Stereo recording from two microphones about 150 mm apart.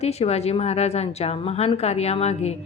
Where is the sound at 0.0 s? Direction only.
45° left (ahead or behind).